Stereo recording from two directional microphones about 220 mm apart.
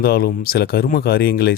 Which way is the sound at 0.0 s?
45° left (ahead or behind).